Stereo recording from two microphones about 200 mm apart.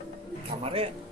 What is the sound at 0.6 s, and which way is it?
Speech, 30° right (ahead or behind).